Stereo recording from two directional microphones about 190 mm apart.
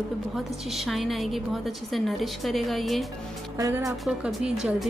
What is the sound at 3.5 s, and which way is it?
Speech, 15° right (ahead or behind).